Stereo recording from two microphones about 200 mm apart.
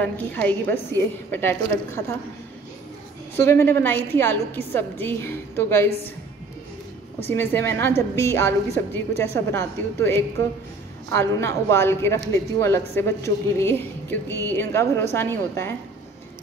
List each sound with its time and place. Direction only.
0.0 s speech: 10° left (ahead or behind)
3.4 s speech: 10° left (ahead or behind)
7.2 s speech: 10° left (ahead or behind)